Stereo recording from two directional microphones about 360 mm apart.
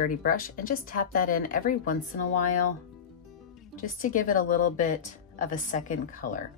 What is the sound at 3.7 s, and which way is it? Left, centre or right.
Speech, left.